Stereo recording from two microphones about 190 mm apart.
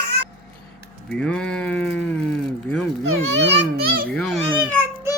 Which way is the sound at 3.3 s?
65° right (ahead or behind).